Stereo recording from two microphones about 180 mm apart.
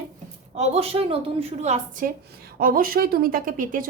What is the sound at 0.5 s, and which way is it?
A woman's voice, 35° right (ahead or behind).